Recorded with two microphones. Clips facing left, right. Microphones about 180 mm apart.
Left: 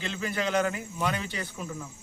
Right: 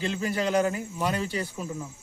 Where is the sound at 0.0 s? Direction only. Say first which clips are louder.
Right 3 dB; 40° right (ahead or behind).